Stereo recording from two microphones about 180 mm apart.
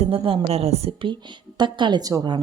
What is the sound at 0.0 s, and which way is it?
A woman's voice, 30° right (ahead or behind).